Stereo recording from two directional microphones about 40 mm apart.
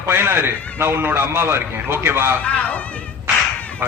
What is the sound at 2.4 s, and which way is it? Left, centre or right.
Speech, left.